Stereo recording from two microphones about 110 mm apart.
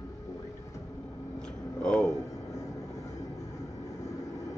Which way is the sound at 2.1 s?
30° left (ahead or behind).